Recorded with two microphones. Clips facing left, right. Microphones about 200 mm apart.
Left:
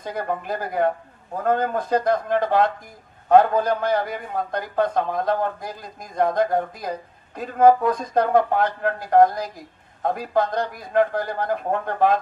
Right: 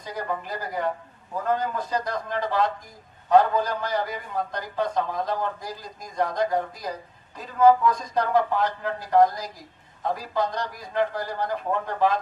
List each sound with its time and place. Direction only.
0.0 s a man's voice: 55° left (ahead or behind)